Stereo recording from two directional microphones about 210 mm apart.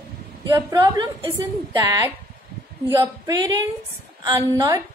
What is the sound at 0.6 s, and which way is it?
A woman's voice, 15° right (ahead or behind).